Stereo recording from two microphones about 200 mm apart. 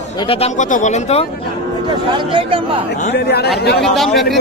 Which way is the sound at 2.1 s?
25° right (ahead or behind).